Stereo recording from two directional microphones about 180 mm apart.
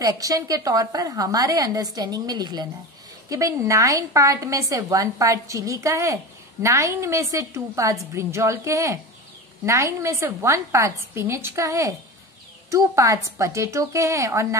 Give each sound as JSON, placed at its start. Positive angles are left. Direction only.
{"t": 0.0, "sound": "a woman's voice", "side_deg": -20}